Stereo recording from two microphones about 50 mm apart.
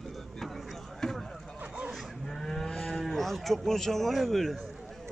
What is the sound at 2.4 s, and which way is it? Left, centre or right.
Cattle, centre.